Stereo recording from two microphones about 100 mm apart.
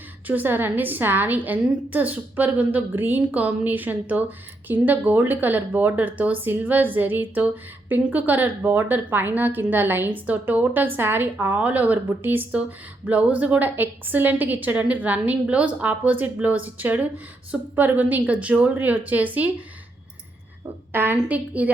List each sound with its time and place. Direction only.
0.3 s a woman's voice: 20° right (ahead or behind)
20.9 s a woman's voice: 20° right (ahead or behind)